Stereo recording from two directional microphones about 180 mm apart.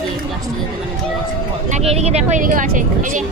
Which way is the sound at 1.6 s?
40° right (ahead or behind).